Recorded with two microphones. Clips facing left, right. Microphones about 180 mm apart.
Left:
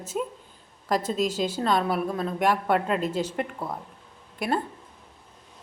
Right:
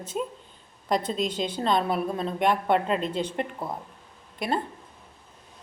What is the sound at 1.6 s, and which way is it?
Speech, 25° right (ahead or behind).